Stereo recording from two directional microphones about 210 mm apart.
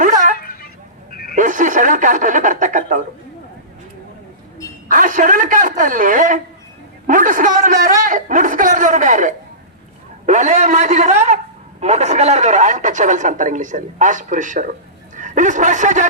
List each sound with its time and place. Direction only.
0.3 s a sound: 45° left (ahead or behind)
1.4 s speech: 40° right (ahead or behind)
4.9 s speech: 40° right (ahead or behind)